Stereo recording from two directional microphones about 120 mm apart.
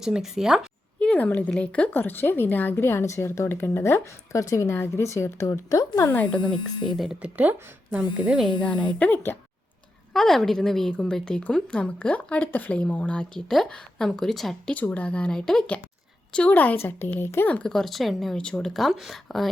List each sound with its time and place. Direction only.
0.0 s a woman's voice: 5° right (ahead or behind)
0.9 s speech: 10° left (ahead or behind); by 6.1 s 25° left (ahead or behind)
6.9 s a woman's voice: centre (ahead or behind)
7.2 s speech: 15° right (ahead or behind)
8.6 s speech: 10° left (ahead or behind)
10.1 s a woman's voice: 5° left (ahead or behind)